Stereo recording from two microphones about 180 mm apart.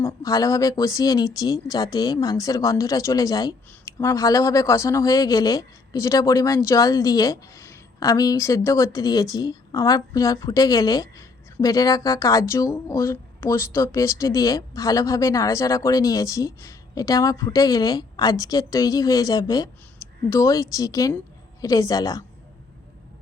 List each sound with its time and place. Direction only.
0.0 s speech: 20° left (ahead or behind)